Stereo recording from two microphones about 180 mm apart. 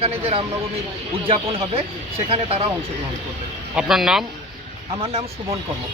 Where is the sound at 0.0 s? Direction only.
35° right (ahead or behind).